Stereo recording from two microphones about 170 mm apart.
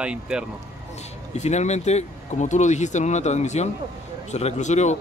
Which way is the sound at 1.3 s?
40° left (ahead or behind).